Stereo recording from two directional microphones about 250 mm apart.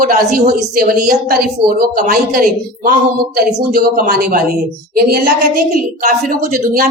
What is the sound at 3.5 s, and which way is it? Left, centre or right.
A woman's voice, right.